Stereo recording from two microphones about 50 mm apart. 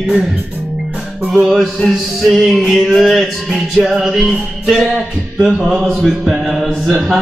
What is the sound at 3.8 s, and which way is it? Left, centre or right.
Music, centre.